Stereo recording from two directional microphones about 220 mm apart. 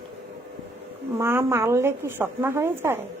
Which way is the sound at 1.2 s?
10° right (ahead or behind).